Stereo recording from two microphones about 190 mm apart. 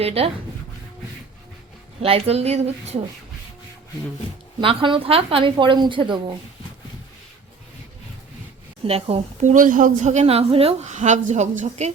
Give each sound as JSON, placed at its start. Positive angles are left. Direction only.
{"t": 0.0, "sound": "a woman's voice", "side_deg": -30}
{"t": 2.0, "sound": "a woman's voice", "side_deg": -30}
{"t": 4.6, "sound": "a woman's voice", "side_deg": -25}
{"t": 8.9, "sound": "a woman's voice", "side_deg": -30}